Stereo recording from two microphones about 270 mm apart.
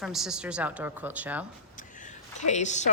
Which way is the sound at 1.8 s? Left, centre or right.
Left.